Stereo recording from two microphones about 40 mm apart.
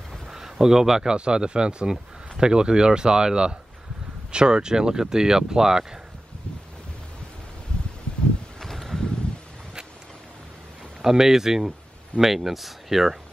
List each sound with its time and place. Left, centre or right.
0.3 s speech: centre
8.5 s a sound: centre
11.0 s speech: centre